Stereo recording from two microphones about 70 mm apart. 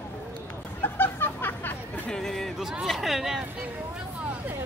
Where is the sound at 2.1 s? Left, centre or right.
Centre.